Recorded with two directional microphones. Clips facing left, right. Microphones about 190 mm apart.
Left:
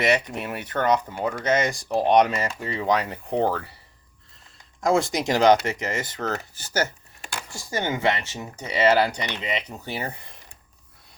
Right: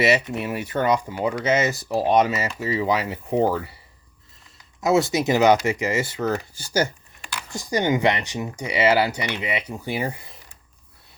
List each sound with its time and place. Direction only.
0.0 s speech: 10° right (ahead or behind)
4.8 s speech: 5° right (ahead or behind)
7.2 s a sound: 45° left (ahead or behind)
7.5 s speech: 15° right (ahead or behind)